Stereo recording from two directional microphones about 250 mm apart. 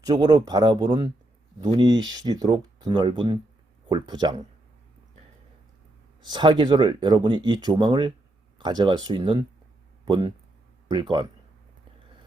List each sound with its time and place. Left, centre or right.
0.0 s speech: centre
6.2 s speech: centre